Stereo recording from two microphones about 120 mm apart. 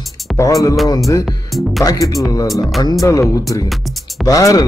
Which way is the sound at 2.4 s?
Centre (ahead or behind).